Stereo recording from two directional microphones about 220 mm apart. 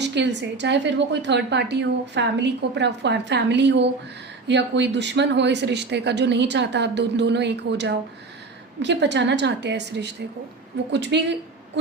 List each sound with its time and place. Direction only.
0.0 s a woman's voice: 50° right (ahead or behind)